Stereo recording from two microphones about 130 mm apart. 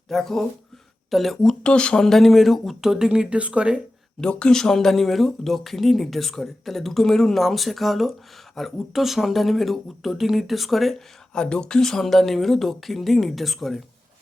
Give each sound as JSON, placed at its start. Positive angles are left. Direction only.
{"t": 0.1, "sound": "speech", "side_deg": 5}
{"t": 4.2, "sound": "speech", "side_deg": 5}